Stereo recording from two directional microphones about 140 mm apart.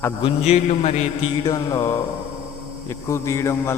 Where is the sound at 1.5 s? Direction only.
25° left (ahead or behind).